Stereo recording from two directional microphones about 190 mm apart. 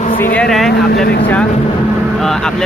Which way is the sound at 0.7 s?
55° left (ahead or behind).